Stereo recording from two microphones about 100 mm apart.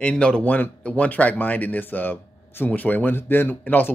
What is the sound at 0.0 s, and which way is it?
Speech, 10° left (ahead or behind).